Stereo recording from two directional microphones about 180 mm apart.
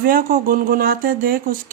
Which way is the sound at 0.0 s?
55° right (ahead or behind).